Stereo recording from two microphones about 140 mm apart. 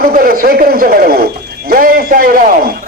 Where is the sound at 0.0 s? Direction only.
90° right.